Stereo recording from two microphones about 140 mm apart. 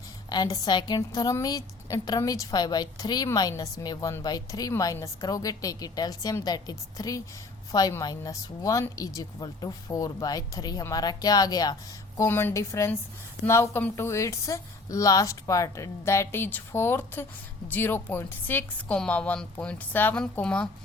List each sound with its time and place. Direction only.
0.3 s a woman's voice: 25° left (ahead or behind); by 20.7 s 5° left (ahead or behind)